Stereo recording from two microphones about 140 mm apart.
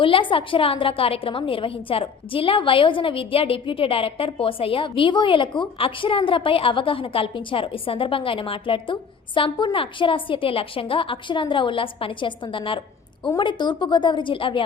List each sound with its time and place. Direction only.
0.0 s a woman's voice: 35° left (ahead or behind)